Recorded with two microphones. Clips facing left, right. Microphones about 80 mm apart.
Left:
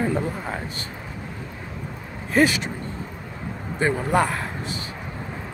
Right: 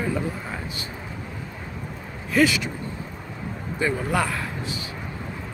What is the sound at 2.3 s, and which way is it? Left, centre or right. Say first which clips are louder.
Speech: left 1 dB; left.